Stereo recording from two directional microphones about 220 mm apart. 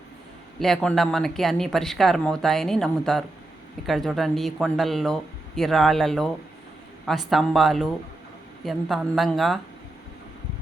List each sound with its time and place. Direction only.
0.6 s speech: centre (ahead or behind)